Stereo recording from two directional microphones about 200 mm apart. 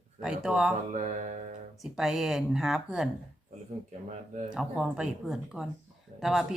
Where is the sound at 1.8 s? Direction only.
Centre (ahead or behind).